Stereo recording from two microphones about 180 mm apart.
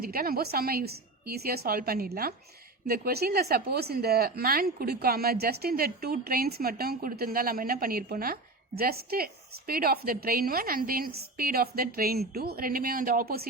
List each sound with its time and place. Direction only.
0.0 s speech: 55° right (ahead or behind)